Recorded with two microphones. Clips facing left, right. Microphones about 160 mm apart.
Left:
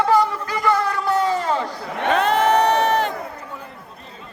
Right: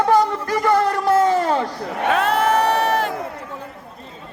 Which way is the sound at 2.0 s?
5° right (ahead or behind).